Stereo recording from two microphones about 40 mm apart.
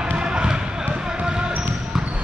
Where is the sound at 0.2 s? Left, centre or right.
Centre.